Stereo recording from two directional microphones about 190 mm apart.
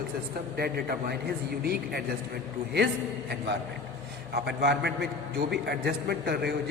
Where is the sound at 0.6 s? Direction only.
55° right (ahead or behind).